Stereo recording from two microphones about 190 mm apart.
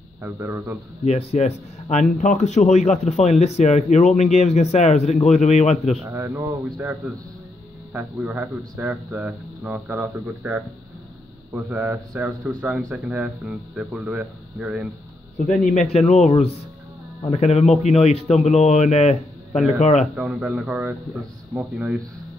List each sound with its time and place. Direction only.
0.2 s speech: 10° right (ahead or behind)
1.0 s speech: 35° left (ahead or behind)
6.0 s speech: 15° right (ahead or behind)
15.6 s speech: 40° left (ahead or behind)
20.2 s speech: 5° right (ahead or behind)